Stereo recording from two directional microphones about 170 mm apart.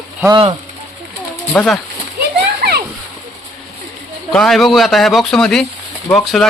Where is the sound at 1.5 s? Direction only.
5° left (ahead or behind).